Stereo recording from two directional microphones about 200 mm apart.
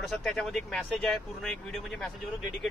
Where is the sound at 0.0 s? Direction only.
Centre (ahead or behind).